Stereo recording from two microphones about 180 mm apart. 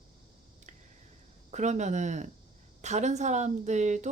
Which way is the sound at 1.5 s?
40° right (ahead or behind).